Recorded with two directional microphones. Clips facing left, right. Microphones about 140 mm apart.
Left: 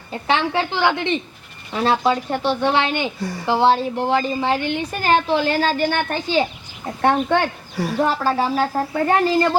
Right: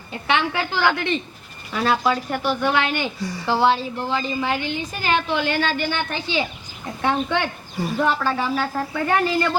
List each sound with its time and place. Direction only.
0.1 s speech: 35° left (ahead or behind)
3.2 s speech: 55° left (ahead or behind)
3.4 s speech: 15° left (ahead or behind)
3.8 s speech: 65° left (ahead or behind)
4.4 s speech: 30° left (ahead or behind)
4.6 s speech: 65° left (ahead or behind)
5.0 s a woman's voice: 35° left (ahead or behind); by 7.4 s 55° left (ahead or behind)
7.8 s speech: 75° left (ahead or behind)
8.0 s speech: 35° left (ahead or behind)